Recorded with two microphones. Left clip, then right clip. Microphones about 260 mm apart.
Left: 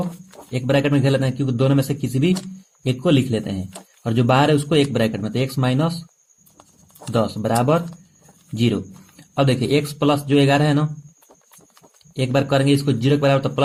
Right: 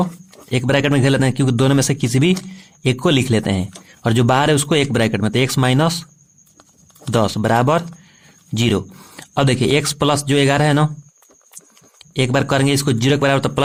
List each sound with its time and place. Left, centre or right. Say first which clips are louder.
0.5 s speech: right 3 dB; right
7.1 s speech: right 4 dB; right
11.9 s speech: right 3 dB; right